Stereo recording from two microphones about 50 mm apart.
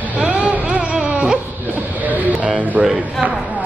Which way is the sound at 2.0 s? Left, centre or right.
Right.